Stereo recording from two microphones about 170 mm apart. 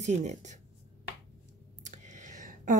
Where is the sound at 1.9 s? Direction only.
45° right (ahead or behind).